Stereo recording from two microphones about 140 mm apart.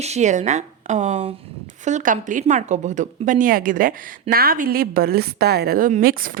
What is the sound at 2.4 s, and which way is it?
A woman's voice, 55° right (ahead or behind).